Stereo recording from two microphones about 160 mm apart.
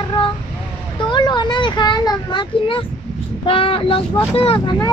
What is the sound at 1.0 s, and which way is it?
A child's voice, 30° left (ahead or behind).